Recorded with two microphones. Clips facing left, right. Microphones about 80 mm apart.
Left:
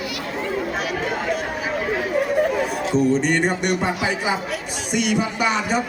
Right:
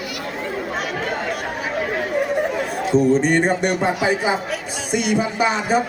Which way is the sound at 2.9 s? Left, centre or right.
Right.